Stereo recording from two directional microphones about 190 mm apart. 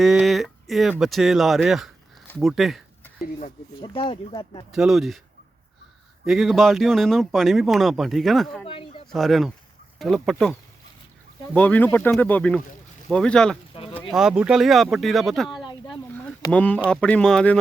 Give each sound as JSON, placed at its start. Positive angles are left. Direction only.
{"t": 0.0, "sound": "a man's voice", "side_deg": 0}
{"t": 3.4, "sound": "speech", "side_deg": 30}
{"t": 4.7, "sound": "a man's voice", "side_deg": 0}
{"t": 6.2, "sound": "a man's voice", "side_deg": 0}
{"t": 8.6, "sound": "speech", "side_deg": 30}
{"t": 9.0, "sound": "a man's voice", "side_deg": 0}